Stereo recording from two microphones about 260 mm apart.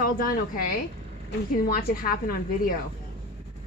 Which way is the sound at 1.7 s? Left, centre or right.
Left.